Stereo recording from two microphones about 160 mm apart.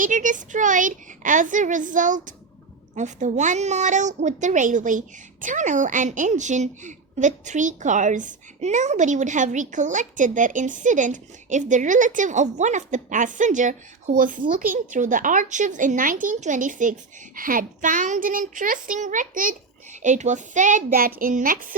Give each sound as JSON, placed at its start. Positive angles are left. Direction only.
{"t": 0.0, "sound": "a woman's voice", "side_deg": -55}